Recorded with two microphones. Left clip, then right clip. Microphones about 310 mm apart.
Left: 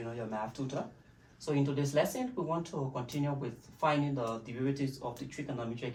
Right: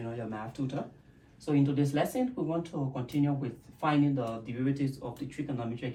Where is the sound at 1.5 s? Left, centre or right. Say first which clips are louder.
Right 4 dB; centre.